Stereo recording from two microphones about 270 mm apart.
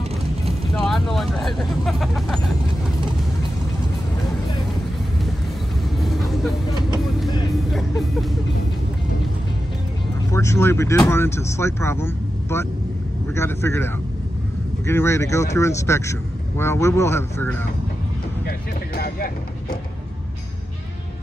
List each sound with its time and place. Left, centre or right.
0.7 s speech: centre
7.7 s music: centre
10.3 s speech: centre
18.4 s vehicle: left